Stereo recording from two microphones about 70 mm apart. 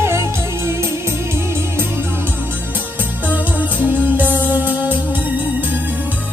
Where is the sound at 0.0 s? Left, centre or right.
Right.